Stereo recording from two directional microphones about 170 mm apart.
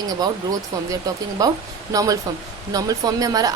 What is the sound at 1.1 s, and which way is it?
Speech, 20° right (ahead or behind).